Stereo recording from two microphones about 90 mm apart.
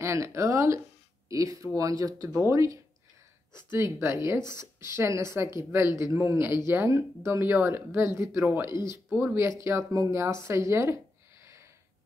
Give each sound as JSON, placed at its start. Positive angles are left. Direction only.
{"t": 0.0, "sound": "speech", "side_deg": -35}
{"t": 9.4, "sound": "speech", "side_deg": -30}